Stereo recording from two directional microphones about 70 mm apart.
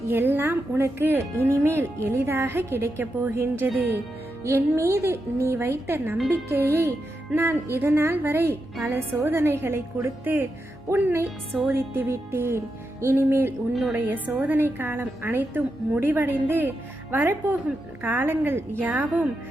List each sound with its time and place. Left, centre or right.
0.1 s a woman's voice: right